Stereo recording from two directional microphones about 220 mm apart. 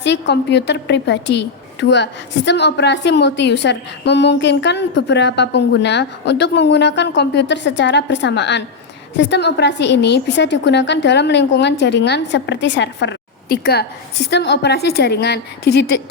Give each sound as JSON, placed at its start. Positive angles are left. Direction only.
{"t": 0.0, "sound": "a woman's voice", "side_deg": 50}